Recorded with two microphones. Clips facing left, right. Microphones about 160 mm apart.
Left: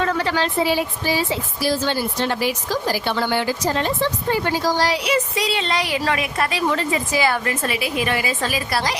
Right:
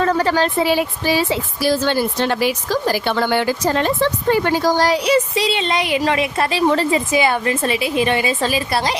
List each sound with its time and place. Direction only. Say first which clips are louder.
0.0 s a woman's voice: right 4 dB; 40° right (ahead or behind)
0.6 s a woman's voice: right 3 dB; 70° right (ahead or behind); by 5.1 s 50° right (ahead or behind)
5.1 s a woman's voice: right 4 dB; 25° right (ahead or behind)